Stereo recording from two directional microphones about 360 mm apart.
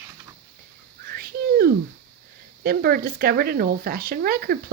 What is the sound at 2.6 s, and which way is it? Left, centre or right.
Speech, right.